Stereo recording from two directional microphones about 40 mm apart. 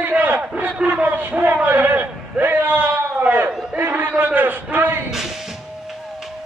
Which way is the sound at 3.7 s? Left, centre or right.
Right.